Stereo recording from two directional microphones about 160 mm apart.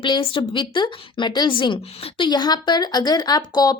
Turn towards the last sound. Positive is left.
turn(degrees=25)  # may be behind; listen again after turning